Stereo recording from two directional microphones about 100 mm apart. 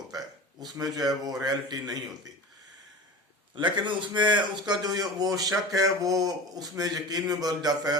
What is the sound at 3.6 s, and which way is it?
A man's voice, 55° right (ahead or behind).